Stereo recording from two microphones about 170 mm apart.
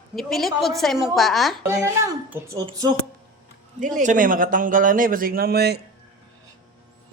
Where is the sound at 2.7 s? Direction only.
25° right (ahead or behind).